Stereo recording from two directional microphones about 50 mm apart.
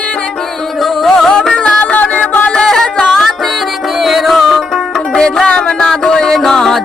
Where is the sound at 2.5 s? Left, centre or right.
Centre.